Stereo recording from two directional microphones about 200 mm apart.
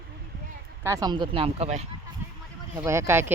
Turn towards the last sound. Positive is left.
turn(degrees=-15)  # may be behind; listen again after turning